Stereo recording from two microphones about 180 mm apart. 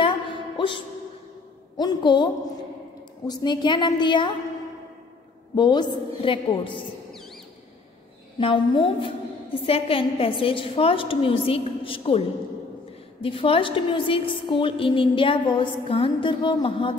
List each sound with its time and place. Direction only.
0.0 s music: 25° left (ahead or behind)
1.8 s a woman's voice: 25° left (ahead or behind)
5.6 s a woman's voice: 25° left (ahead or behind)
7.1 s a sound: centre (ahead or behind)
8.4 s a woman's voice: 30° left (ahead or behind)
13.2 s a woman's voice: 30° left (ahead or behind)